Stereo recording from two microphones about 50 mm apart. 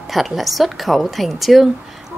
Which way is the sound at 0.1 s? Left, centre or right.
Centre.